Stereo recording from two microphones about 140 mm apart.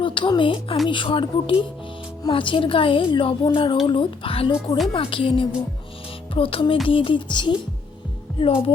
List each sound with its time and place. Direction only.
0.0 s speech: 35° left (ahead or behind)